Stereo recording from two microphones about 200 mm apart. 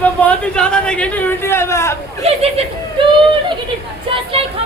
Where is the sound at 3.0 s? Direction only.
25° right (ahead or behind).